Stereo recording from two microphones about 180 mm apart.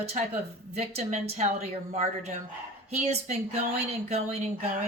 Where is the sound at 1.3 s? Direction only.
40° right (ahead or behind).